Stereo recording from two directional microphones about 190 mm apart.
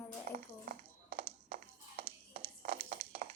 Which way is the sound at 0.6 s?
55° right (ahead or behind).